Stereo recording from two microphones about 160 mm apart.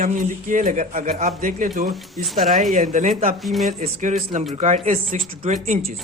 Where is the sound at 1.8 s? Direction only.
Centre (ahead or behind).